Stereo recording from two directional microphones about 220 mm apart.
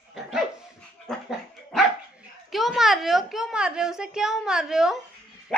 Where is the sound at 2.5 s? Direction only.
Centre (ahead or behind).